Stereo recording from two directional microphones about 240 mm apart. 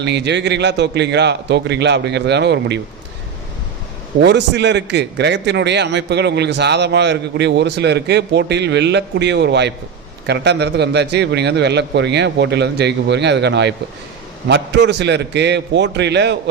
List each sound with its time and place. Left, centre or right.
0.0 s a man's voice: right
4.2 s a man's voice: right